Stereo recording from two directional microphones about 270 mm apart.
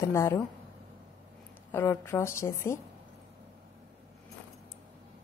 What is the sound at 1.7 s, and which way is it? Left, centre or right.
A woman's voice, centre.